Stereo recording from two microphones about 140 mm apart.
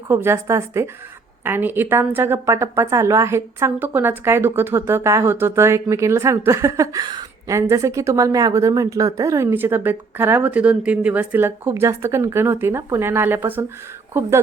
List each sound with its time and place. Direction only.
0.1 s a woman's voice: 15° right (ahead or behind)